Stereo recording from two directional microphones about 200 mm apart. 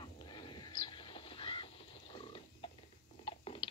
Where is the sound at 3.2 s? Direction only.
25° left (ahead or behind).